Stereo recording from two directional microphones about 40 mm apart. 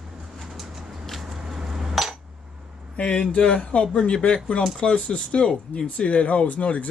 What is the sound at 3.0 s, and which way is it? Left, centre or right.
Speech, left.